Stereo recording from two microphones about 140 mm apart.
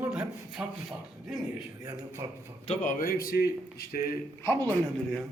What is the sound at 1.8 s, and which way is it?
Speech, 20° right (ahead or behind).